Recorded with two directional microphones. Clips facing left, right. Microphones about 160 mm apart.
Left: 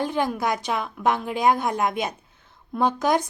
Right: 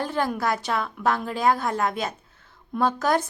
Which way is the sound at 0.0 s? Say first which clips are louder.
Left 1 dB; 15° left (ahead or behind).